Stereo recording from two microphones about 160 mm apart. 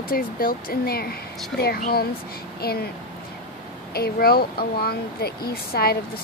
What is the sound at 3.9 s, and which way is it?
Speech, 75° left (ahead or behind).